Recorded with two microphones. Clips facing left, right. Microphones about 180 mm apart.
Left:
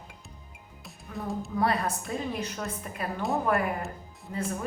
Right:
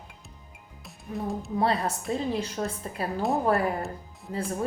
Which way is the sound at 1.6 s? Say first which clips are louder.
Right 1 dB; 25° right (ahead or behind).